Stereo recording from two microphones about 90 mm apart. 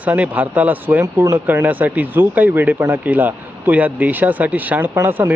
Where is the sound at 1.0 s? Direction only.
30° right (ahead or behind).